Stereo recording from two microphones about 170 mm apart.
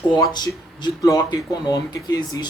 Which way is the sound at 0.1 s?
25° left (ahead or behind).